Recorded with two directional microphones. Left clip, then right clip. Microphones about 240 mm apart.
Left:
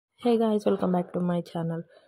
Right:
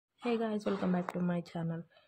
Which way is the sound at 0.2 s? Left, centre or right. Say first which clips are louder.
Left 10 dB; left.